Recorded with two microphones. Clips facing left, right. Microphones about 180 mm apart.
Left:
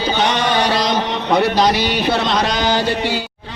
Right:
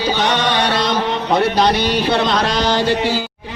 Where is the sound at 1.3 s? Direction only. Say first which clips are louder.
Left 1 dB; centre (ahead or behind).